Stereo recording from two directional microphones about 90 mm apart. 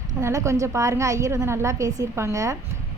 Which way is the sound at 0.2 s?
35° right (ahead or behind).